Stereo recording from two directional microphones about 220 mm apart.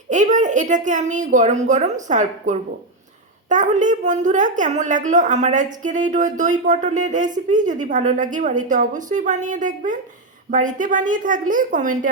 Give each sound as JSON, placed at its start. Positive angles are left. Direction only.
{"t": 0.1, "sound": "a woman's voice", "side_deg": -35}